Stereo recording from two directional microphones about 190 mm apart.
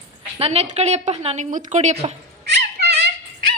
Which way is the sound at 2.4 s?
60° right (ahead or behind).